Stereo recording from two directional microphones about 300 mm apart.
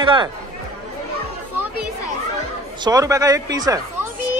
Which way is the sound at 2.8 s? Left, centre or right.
Centre.